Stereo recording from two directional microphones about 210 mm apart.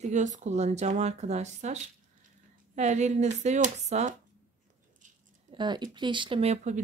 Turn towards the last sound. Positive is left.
turn(degrees=-35)  # may be behind; listen again after turning